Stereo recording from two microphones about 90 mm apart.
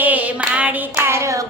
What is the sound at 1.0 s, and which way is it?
Hands, 30° right (ahead or behind).